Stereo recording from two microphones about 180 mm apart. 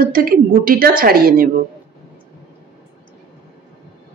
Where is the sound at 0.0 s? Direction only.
50° right (ahead or behind).